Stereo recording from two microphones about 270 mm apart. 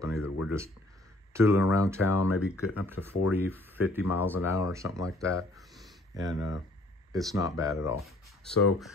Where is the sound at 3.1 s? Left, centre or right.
Left.